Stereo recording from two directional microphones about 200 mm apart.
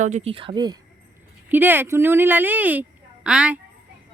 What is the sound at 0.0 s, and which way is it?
Speech, 35° right (ahead or behind).